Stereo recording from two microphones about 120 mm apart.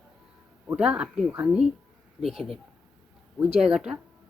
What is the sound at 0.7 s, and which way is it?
A woman's voice, 10° right (ahead or behind).